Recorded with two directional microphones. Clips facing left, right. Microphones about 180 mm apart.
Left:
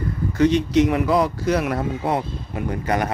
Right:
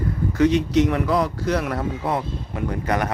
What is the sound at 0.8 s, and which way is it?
Speech, 10° left (ahead or behind).